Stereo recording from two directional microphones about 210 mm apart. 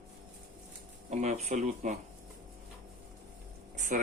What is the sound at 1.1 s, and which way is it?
Speech, 35° right (ahead or behind).